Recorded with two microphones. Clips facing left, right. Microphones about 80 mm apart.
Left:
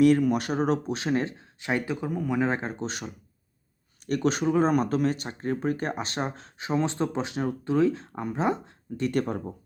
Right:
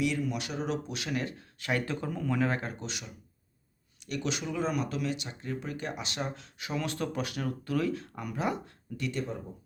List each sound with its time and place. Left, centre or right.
0.0 s speech: left
9.0 s speech: left